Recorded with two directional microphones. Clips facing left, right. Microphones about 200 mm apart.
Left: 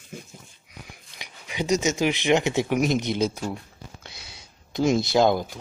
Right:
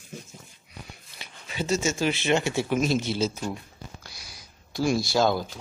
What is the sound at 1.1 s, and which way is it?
Speech, 15° left (ahead or behind).